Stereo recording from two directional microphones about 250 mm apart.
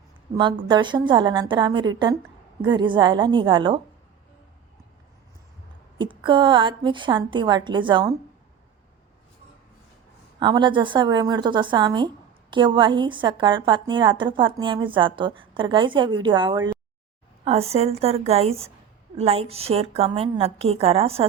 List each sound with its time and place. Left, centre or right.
0.7 s speech: centre
6.0 s speech: centre
10.4 s speech: centre